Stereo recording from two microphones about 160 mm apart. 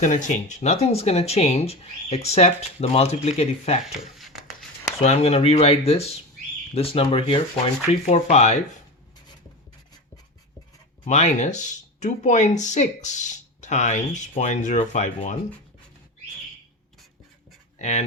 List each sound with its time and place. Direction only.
0.0 s speech: 50° left (ahead or behind)
3.8 s a sound: centre (ahead or behind)
5.0 s speech: 40° left (ahead or behind)
11.0 s speech: 45° left (ahead or behind)
17.7 s speech: 45° left (ahead or behind)